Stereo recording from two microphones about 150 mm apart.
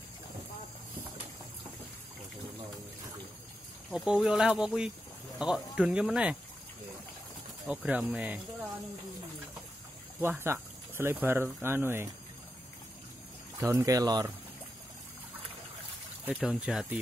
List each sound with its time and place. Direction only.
3.9 s speech: 5° right (ahead or behind)
7.6 s speech: 10° right (ahead or behind)
10.2 s speech: 15° right (ahead or behind)
13.6 s speech: 20° right (ahead or behind)
16.3 s speech: 5° right (ahead or behind)